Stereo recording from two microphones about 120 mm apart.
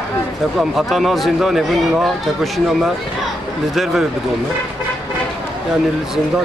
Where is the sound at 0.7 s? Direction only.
Centre (ahead or behind).